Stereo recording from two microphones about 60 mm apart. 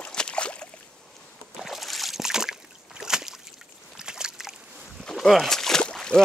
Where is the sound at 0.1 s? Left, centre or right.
Centre.